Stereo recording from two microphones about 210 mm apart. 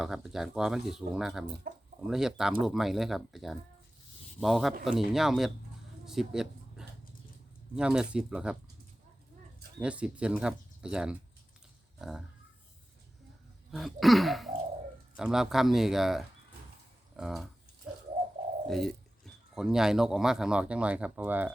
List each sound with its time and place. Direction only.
0.0 s speech: centre (ahead or behind)
1.7 s speech: 40° right (ahead or behind)
2.0 s speech: centre (ahead or behind)
9.8 s speech: 5° right (ahead or behind)
13.7 s speech: centre (ahead or behind)
17.8 s bird: 5° right (ahead or behind)
18.7 s speech: centre (ahead or behind)